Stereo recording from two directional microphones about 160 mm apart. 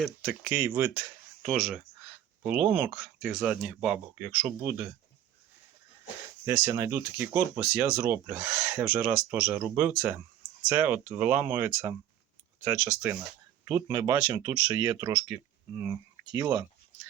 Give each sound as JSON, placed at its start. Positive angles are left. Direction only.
{"t": 0.3, "sound": "speech", "side_deg": -10}
{"t": 6.4, "sound": "speech", "side_deg": -15}
{"t": 13.7, "sound": "speech", "side_deg": -25}